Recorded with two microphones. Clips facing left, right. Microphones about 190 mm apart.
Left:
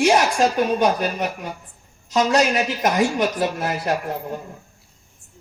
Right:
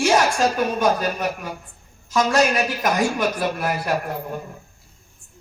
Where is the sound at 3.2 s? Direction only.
20° left (ahead or behind).